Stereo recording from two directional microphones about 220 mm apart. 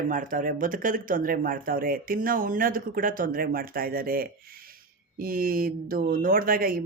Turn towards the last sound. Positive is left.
turn(degrees=-40)  # may be behind; listen again after turning